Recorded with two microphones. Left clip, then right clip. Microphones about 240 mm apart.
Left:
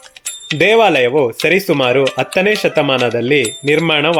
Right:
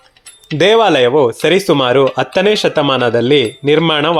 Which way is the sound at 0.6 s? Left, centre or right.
Right.